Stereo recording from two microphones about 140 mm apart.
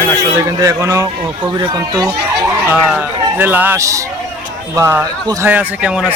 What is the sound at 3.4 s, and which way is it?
Speech, 15° right (ahead or behind).